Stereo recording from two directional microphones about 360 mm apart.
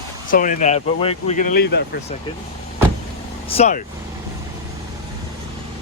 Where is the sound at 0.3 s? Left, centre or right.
Left.